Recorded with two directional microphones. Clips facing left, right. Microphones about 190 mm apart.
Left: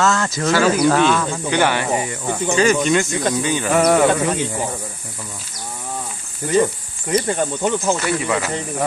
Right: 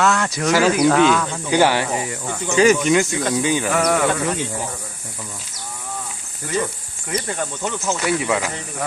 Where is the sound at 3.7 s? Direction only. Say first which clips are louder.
Left 7 dB; 25° left (ahead or behind).